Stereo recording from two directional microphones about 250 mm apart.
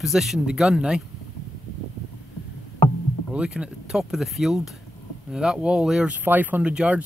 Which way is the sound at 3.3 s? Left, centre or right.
Centre.